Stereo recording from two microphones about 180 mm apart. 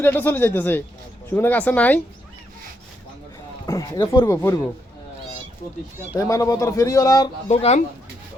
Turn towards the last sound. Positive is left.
turn(degrees=35)  # may be behind; listen again after turning